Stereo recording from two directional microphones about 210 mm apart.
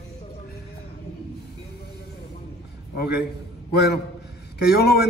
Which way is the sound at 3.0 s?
50° left (ahead or behind).